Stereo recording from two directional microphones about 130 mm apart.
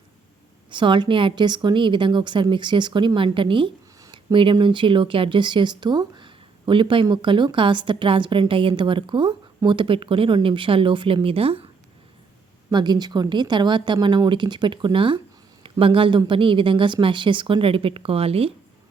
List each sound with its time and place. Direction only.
0.7 s speech: 40° right (ahead or behind)
12.7 s speech: 35° right (ahead or behind)